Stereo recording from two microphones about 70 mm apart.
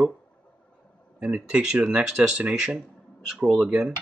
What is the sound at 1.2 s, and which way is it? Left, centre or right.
Speech, centre.